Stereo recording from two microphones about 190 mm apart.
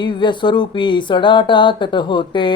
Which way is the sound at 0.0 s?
25° left (ahead or behind).